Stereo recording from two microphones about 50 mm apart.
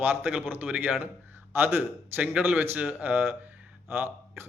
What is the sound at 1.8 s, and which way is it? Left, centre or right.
Speech, right.